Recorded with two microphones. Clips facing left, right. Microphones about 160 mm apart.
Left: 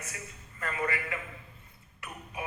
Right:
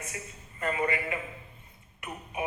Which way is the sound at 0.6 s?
20° right (ahead or behind).